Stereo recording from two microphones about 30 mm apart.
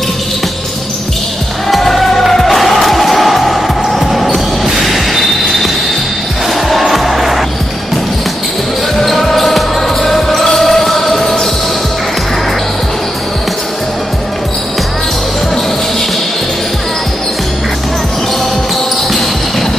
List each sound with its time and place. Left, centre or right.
1.7 s music: centre
4.0 s basketball bounce: centre
4.8 s a sound: centre
6.9 s music: centre
9.0 s basketball bounce: centre